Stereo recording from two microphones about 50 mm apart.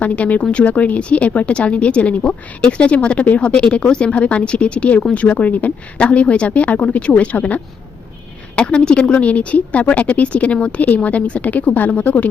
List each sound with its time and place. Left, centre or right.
0.0 s a woman's voice: left